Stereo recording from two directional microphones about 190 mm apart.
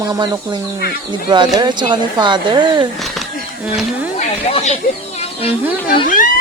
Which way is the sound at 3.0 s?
Centre (ahead or behind).